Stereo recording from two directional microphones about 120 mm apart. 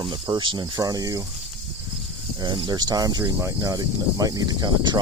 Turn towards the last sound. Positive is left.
turn(degrees=-35)  # may be behind; listen again after turning